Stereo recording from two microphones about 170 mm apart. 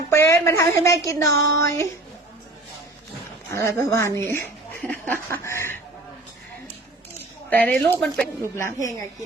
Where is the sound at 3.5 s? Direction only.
15° left (ahead or behind).